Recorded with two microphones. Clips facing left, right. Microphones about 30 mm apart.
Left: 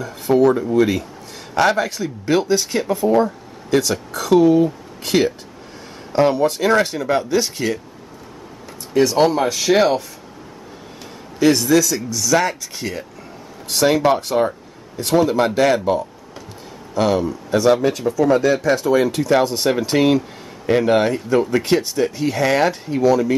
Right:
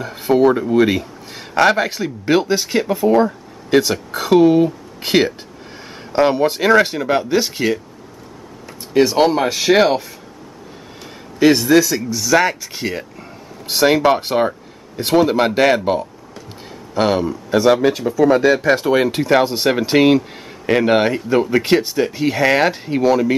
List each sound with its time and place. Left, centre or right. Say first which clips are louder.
0.0 s speech: right 1 dB; right
8.9 s speech: right 1 dB; right
11.3 s speech: right 3 dB; right